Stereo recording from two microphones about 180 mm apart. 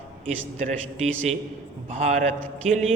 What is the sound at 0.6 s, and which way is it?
A man's voice, 40° right (ahead or behind).